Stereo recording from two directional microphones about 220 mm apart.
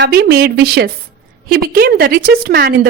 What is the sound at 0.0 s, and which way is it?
A woman's voice, 50° right (ahead or behind).